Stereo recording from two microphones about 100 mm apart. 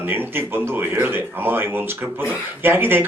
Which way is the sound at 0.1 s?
20° right (ahead or behind).